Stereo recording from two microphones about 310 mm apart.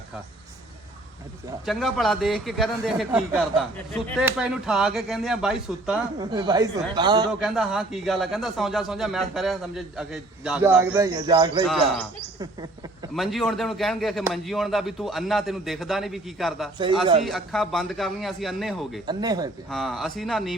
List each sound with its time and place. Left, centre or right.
1.6 s a man's voice: centre
6.1 s speech: centre
7.3 s a man's voice: centre
13.1 s a man's voice: centre
19.0 s speech: centre
19.7 s a man's voice: centre